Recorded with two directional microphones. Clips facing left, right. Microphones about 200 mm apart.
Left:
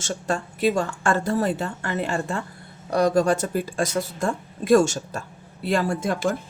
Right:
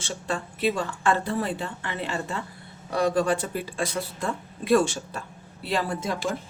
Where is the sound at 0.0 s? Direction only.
45° left (ahead or behind).